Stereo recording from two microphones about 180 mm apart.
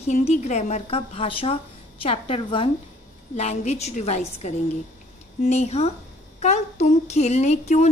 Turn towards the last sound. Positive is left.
turn(degrees=40)  # may be behind; listen again after turning